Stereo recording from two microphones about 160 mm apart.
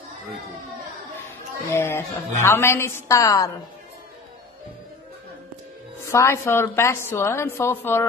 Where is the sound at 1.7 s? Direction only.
15° left (ahead or behind).